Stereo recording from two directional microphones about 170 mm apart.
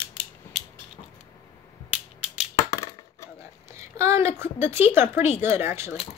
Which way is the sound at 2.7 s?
15° left (ahead or behind).